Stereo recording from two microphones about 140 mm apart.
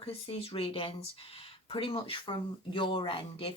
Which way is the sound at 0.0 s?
45° left (ahead or behind).